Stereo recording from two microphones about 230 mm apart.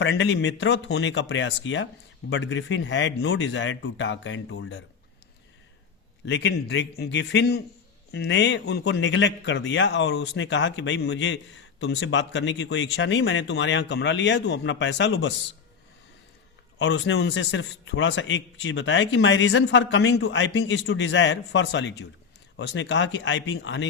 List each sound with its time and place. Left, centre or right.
0.0 s a man's voice: left
6.2 s a man's voice: left
16.7 s a man's voice: left